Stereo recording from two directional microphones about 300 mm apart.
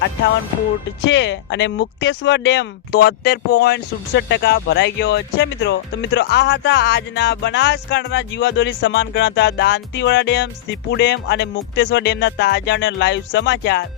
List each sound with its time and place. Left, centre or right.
1.0 s speech: left